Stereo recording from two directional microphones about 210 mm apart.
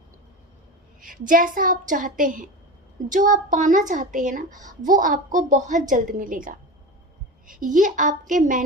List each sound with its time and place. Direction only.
1.0 s a woman's voice: 40° right (ahead or behind)